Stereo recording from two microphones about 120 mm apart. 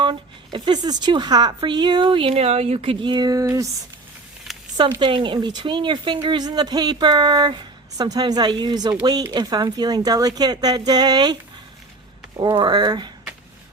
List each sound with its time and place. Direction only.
0.0 s speech: 40° right (ahead or behind)
3.4 s speech: 25° right (ahead or behind)
4.9 s speech: 45° right (ahead or behind)
12.5 s speech: 40° right (ahead or behind)